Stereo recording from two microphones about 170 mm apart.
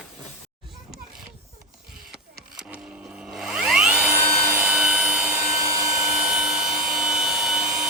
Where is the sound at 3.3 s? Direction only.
5° right (ahead or behind).